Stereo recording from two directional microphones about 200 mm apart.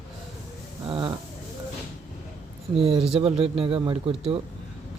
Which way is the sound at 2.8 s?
30° right (ahead or behind).